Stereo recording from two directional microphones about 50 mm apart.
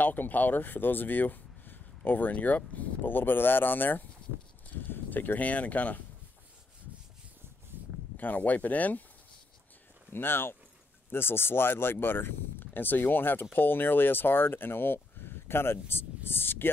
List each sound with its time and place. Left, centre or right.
0.0 s speech: left
7.7 s a sound: right
8.2 s speech: left
10.1 s speech: left